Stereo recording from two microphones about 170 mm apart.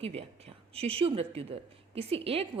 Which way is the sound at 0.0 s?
35° right (ahead or behind).